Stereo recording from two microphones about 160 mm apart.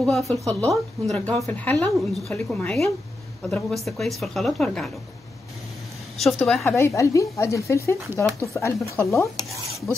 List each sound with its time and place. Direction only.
0.0 s a woman's voice: 5° left (ahead or behind)
6.1 s a woman's voice: centre (ahead or behind)
6.6 s a woman's voice: 15° left (ahead or behind)